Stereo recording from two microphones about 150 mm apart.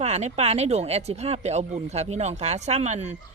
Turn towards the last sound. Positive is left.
turn(degrees=-50)  # may be behind; listen again after turning